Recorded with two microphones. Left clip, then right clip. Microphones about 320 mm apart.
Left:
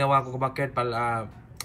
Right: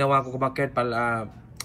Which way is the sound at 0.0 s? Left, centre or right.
Centre.